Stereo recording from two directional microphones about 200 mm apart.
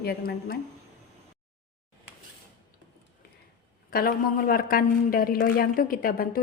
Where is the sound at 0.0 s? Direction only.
50° left (ahead or behind).